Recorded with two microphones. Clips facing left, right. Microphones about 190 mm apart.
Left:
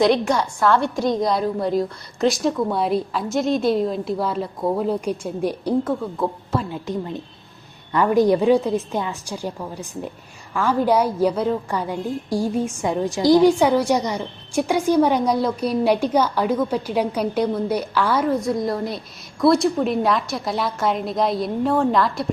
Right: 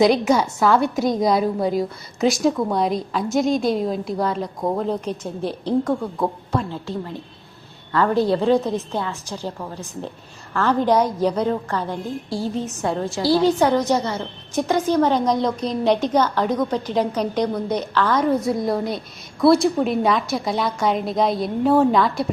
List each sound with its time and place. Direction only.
0.0 s a woman's voice: centre (ahead or behind)
6.8 s a woman's voice: 20° left (ahead or behind); by 22.3 s centre (ahead or behind)